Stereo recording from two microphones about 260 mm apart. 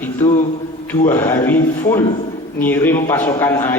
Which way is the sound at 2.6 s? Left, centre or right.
Centre.